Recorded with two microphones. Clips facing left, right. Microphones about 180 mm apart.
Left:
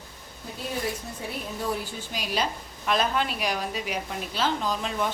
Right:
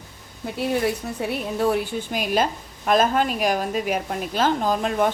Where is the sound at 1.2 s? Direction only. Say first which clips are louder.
Right 10 dB; 70° right (ahead or behind).